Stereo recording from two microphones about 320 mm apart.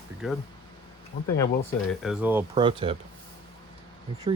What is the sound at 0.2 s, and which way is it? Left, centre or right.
Speech, centre.